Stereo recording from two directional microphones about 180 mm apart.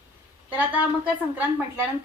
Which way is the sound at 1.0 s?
10° right (ahead or behind).